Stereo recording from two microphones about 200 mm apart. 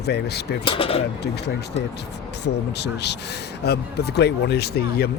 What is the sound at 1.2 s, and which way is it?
A man's voice, 55° left (ahead or behind).